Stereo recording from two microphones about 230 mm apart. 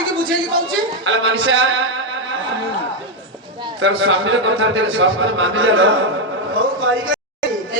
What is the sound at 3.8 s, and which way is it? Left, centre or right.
A man's voice, right.